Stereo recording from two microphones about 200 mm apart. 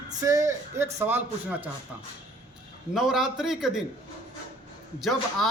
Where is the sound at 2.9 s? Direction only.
Centre (ahead or behind).